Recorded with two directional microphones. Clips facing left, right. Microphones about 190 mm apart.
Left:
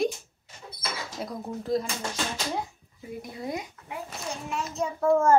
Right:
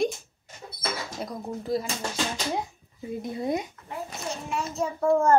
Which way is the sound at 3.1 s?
25° right (ahead or behind).